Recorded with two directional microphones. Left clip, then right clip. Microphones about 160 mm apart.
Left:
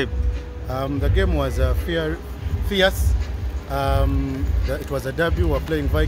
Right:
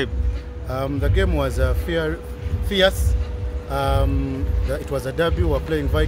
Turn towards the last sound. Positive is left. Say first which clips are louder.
# right 1 dB
turn(degrees=-10)  # may be behind; listen again after turning